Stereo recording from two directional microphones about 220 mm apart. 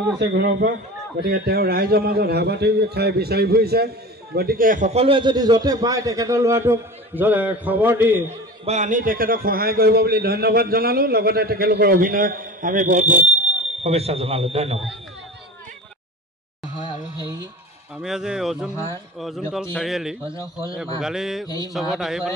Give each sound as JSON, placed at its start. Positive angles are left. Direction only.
{"t": 0.2, "sound": "a man's voice", "side_deg": -50}
{"t": 8.6, "sound": "a man's voice", "side_deg": -35}
{"t": 17.9, "sound": "speech", "side_deg": -5}
{"t": 21.5, "sound": "mantra", "side_deg": 15}
{"t": 21.9, "sound": "speech", "side_deg": 0}